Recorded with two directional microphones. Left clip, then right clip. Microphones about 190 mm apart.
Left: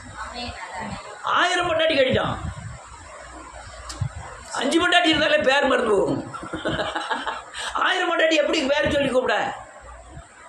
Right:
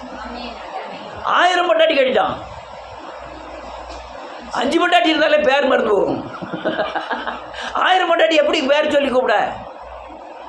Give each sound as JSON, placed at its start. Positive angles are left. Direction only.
{"t": 1.2, "sound": "a man's voice", "side_deg": -5}
{"t": 4.5, "sound": "a man's voice", "side_deg": -5}